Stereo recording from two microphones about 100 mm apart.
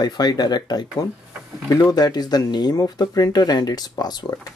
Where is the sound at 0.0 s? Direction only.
40° left (ahead or behind).